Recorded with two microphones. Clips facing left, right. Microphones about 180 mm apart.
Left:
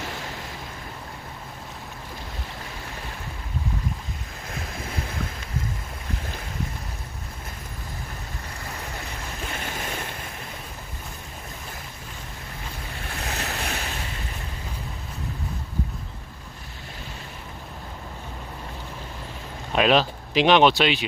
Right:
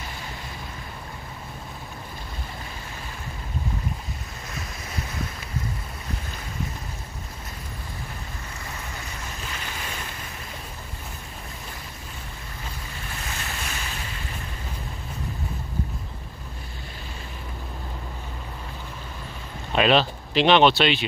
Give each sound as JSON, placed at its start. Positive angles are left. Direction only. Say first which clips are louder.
{"t": 9.5, "sound": "waves", "louder": "left 5 dB", "side_deg": 50}
{"t": 13.2, "sound": "waves", "louder": "left 5 dB", "side_deg": 65}
{"t": 19.7, "sound": "speech", "louder": "even", "side_deg": 5}